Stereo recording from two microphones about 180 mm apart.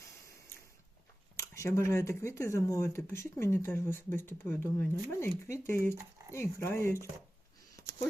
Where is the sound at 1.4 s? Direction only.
15° left (ahead or behind).